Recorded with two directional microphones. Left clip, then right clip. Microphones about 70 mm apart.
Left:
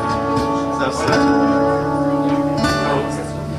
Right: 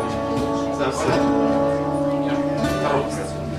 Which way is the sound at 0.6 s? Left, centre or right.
Centre.